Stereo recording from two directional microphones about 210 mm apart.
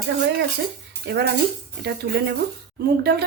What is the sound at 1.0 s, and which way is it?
Speech, 50° right (ahead or behind).